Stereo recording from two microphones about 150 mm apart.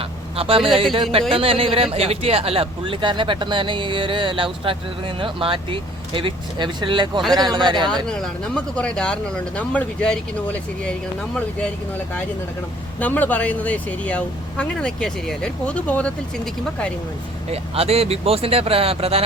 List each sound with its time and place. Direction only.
0.3 s a man's voice: 40° right (ahead or behind)
8.0 s speech: 5° left (ahead or behind)
13.0 s speech: 10° left (ahead or behind)
17.5 s a man's voice: 40° right (ahead or behind)